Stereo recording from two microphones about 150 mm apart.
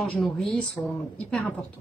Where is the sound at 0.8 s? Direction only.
20° left (ahead or behind).